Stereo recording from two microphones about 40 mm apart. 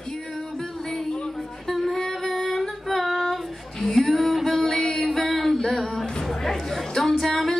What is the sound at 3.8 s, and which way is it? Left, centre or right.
Music, centre.